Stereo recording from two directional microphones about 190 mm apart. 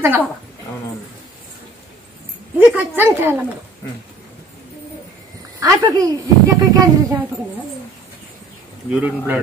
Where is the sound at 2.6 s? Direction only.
10° right (ahead or behind).